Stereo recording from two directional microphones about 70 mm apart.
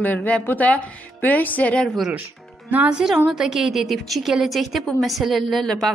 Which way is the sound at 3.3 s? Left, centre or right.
Centre.